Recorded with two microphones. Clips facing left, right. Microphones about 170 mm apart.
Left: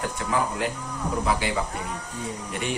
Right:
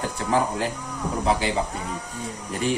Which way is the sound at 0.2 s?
30° right (ahead or behind).